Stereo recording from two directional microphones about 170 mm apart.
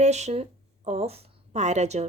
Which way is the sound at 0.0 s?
40° right (ahead or behind).